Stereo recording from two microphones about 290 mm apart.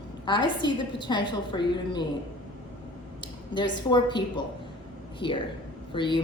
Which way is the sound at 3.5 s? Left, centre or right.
Centre.